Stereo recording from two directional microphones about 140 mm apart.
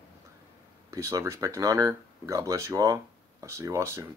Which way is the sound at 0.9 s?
20° right (ahead or behind).